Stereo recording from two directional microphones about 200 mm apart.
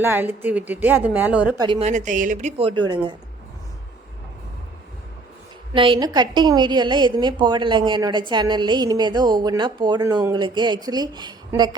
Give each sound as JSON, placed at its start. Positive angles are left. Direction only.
{"t": 0.0, "sound": "a woman's voice", "side_deg": -10}
{"t": 1.5, "sound": "a woman's voice", "side_deg": -25}
{"t": 1.9, "sound": "a woman's voice", "side_deg": -40}
{"t": 5.7, "sound": "a woman's voice", "side_deg": -25}